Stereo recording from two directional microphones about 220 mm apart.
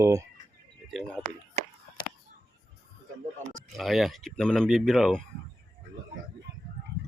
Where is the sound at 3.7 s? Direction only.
Centre (ahead or behind).